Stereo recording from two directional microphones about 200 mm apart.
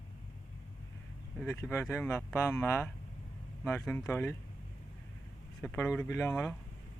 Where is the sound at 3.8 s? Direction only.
Centre (ahead or behind).